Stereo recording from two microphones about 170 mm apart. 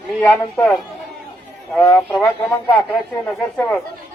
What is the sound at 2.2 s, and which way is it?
Speech, 15° left (ahead or behind).